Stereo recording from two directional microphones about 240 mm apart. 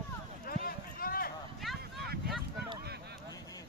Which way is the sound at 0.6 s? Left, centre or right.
Left.